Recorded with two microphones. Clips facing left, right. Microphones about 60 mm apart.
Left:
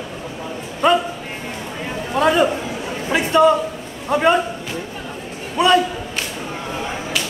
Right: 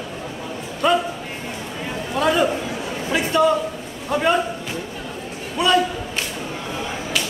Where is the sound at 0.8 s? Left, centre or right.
Left.